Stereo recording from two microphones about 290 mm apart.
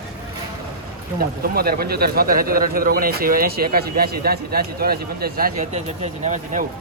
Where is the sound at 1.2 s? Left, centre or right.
Right.